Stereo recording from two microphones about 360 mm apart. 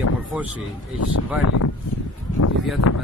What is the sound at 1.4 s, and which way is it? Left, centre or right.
Speech, left.